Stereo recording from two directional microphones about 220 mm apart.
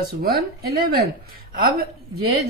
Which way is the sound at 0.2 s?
45° right (ahead or behind).